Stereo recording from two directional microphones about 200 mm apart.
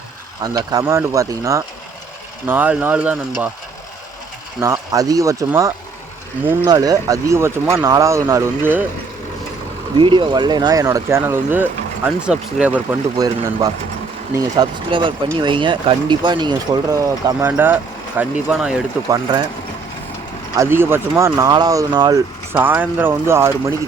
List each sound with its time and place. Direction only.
0.4 s speech: 20° right (ahead or behind)
4.6 s speech: 15° right (ahead or behind)
10.0 s speech: 25° right (ahead or behind); by 12.8 s 5° right (ahead or behind)
13.1 s speech: 20° right (ahead or behind)
19.0 s speech: 20° right (ahead or behind)
20.6 s speech: 10° right (ahead or behind)